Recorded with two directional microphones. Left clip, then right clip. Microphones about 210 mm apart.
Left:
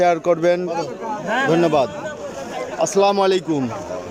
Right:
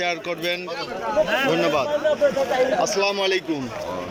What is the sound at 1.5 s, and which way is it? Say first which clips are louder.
Speech: left 4 dB; 20° left (ahead or behind).